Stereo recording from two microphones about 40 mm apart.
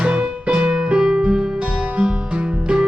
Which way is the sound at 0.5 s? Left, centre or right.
Right.